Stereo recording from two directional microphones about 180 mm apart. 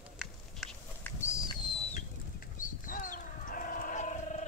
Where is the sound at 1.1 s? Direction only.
10° left (ahead or behind).